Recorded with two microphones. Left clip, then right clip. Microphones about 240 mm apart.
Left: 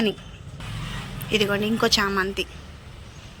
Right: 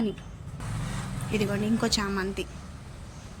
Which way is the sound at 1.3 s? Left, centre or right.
Centre.